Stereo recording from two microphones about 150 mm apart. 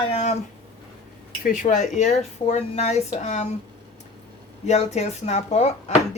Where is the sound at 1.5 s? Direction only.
55° left (ahead or behind).